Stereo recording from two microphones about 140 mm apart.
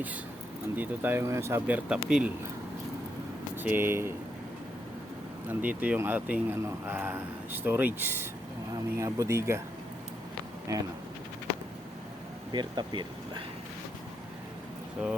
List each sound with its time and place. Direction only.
0.8 s speech: 15° right (ahead or behind)
3.5 s speech: 15° right (ahead or behind)
5.5 s speech: 10° right (ahead or behind)
10.7 s speech: 25° right (ahead or behind)
12.5 s speech: 30° right (ahead or behind)